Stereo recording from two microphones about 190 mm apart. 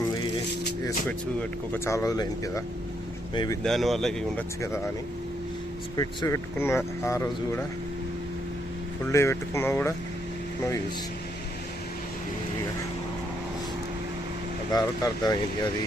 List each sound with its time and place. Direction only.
0.0 s music: 20° left (ahead or behind)
1.0 s speech: 10° left (ahead or behind)
3.6 s speech: centre (ahead or behind)
6.0 s speech: 15° left (ahead or behind)
9.1 s speech: 15° left (ahead or behind)
14.7 s speech: 20° left (ahead or behind)